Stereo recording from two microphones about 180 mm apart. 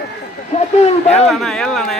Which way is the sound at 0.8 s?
35° left (ahead or behind).